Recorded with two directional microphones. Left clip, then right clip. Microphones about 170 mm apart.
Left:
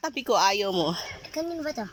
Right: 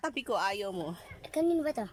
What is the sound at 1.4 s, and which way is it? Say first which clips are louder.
Speech: right 2 dB; 30° right (ahead or behind).